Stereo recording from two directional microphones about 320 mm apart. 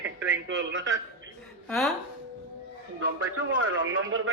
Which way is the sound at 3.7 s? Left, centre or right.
Right.